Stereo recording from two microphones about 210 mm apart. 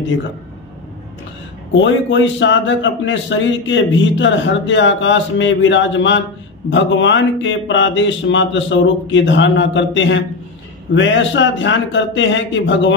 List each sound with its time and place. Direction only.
1.8 s a man's voice: 60° left (ahead or behind)